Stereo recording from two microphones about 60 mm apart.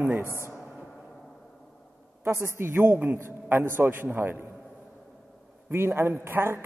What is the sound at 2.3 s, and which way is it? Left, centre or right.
A man's voice, right.